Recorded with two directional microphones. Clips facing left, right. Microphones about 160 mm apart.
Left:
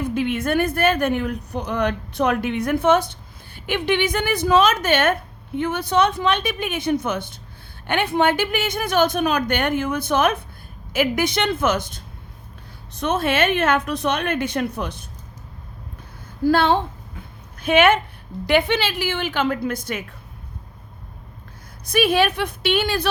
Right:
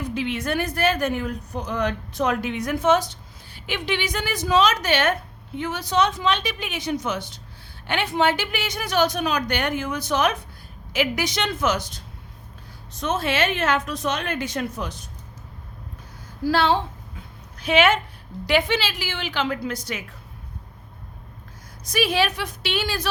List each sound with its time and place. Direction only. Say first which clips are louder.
0.0 s a woman's voice: left 4 dB; 55° left (ahead or behind)
16.4 s a woman's voice: left 3 dB; 50° left (ahead or behind)
21.8 s speech: left 4 dB; 55° left (ahead or behind)